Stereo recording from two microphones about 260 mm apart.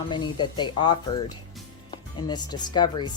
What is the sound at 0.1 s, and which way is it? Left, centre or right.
Speech, centre.